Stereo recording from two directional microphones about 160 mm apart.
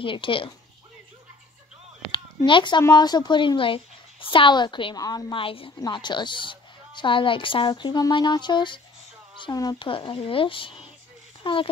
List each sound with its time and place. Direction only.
0.0 s speech: 30° left (ahead or behind)
2.1 s a sound: 30° left (ahead or behind)
2.8 s a woman's voice: 25° left (ahead or behind)